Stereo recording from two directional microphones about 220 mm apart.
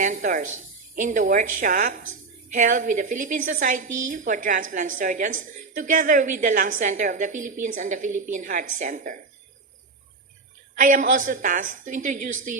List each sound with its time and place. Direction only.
0.0 s a woman's voice: 35° right (ahead or behind)
10.8 s a woman's voice: 35° right (ahead or behind)